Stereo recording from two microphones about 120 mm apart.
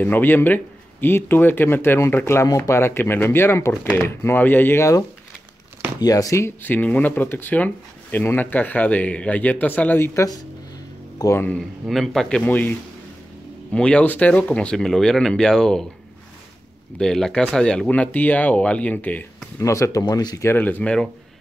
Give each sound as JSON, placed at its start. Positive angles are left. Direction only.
{"t": 0.0, "sound": "speech", "side_deg": 15}
{"t": 11.8, "sound": "speech", "side_deg": 0}
{"t": 17.0, "sound": "speech", "side_deg": 5}
{"t": 19.6, "sound": "speech", "side_deg": 25}
{"t": 20.4, "sound": "speech", "side_deg": 15}